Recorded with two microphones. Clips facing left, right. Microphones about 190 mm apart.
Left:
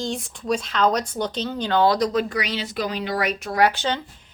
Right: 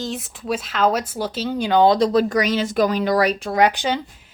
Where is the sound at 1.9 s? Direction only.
30° right (ahead or behind); by 4.3 s 10° right (ahead or behind).